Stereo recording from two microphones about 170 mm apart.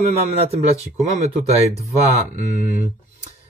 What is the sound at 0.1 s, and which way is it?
Speech, 35° right (ahead or behind).